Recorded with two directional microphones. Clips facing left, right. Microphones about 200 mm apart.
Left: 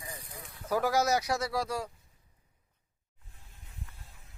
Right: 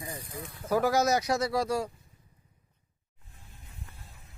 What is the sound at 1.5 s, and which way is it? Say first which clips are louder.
Speech: right 4 dB; centre (ahead or behind).